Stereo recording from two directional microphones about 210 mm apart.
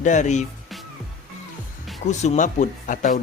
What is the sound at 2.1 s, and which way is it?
Speech, 35° left (ahead or behind).